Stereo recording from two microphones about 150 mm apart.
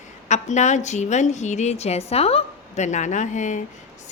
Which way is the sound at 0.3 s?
50° left (ahead or behind).